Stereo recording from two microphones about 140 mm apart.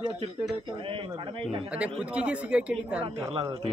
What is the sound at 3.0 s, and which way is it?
Speech, 45° right (ahead or behind).